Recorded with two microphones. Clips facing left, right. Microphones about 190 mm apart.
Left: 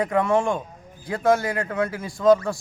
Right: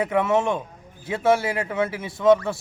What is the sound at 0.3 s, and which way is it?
A man's voice, 5° right (ahead or behind).